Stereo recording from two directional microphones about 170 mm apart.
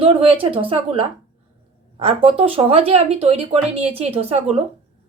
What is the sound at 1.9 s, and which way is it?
Speech, 35° right (ahead or behind).